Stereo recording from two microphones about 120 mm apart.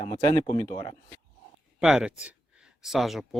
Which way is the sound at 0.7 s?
45° left (ahead or behind).